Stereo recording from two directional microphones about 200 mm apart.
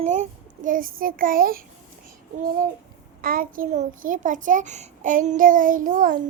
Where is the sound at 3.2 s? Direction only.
45° right (ahead or behind).